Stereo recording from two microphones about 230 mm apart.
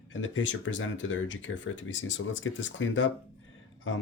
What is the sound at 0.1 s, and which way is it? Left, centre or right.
Speech, left.